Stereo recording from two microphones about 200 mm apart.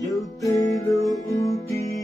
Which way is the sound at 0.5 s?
15° left (ahead or behind).